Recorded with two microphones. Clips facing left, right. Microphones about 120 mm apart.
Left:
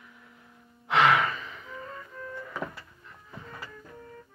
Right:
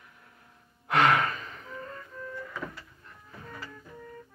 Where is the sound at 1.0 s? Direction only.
45° right (ahead or behind).